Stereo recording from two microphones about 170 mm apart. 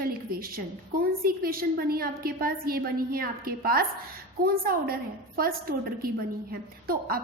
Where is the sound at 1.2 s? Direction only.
60° right (ahead or behind).